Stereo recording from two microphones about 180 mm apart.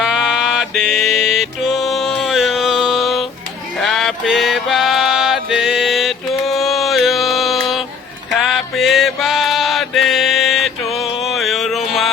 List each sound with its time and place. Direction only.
0.0 s music: centre (ahead or behind)
3.8 s mantra: centre (ahead or behind)